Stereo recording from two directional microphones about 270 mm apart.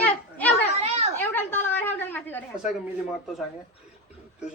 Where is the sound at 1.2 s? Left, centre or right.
Centre.